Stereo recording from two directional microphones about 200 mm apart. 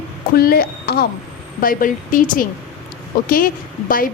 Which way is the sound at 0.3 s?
50° left (ahead or behind).